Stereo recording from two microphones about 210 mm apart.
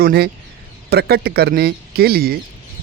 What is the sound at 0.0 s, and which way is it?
Speech, 50° right (ahead or behind).